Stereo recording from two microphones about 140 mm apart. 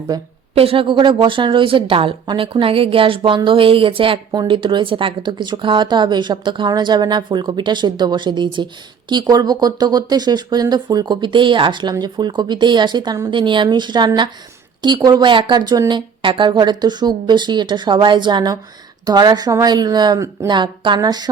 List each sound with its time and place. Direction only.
0.1 s speech: 25° right (ahead or behind)
0.5 s speech: 45° right (ahead or behind); by 20.6 s 20° right (ahead or behind)
20.6 s speech: 35° right (ahead or behind)